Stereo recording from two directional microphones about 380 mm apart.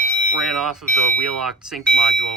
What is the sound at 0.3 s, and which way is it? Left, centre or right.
Speech, centre.